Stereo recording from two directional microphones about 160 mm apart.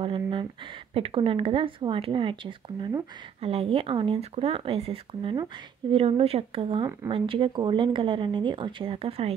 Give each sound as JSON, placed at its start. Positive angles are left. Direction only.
{"t": 0.0, "sound": "speech", "side_deg": -30}